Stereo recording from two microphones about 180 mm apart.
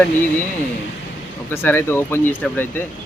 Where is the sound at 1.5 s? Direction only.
10° left (ahead or behind).